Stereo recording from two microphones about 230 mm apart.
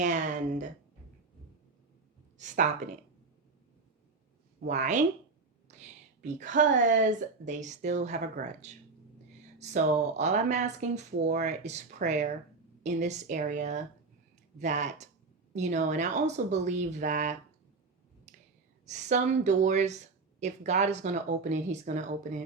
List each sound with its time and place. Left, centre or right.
0.0 s speech: right
4.7 s speech: right
18.3 s finger snapping: right
18.9 s speech: right